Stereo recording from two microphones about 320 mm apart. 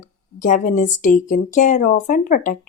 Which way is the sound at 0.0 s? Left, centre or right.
Left.